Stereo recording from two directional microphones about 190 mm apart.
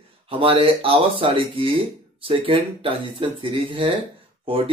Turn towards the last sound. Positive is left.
turn(degrees=-30)  # may be behind; listen again after turning